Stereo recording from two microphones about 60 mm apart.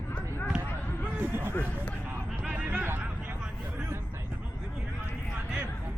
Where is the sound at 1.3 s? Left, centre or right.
Right.